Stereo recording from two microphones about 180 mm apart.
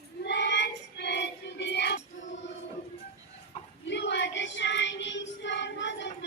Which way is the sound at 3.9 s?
75° left (ahead or behind).